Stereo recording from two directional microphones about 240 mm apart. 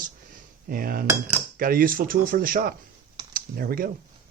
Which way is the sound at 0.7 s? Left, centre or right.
Right.